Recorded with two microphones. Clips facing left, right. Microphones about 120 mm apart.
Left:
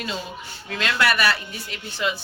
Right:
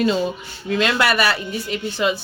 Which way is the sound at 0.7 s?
20° right (ahead or behind).